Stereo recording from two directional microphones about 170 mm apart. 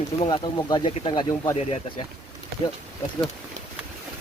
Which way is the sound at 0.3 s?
25° left (ahead or behind).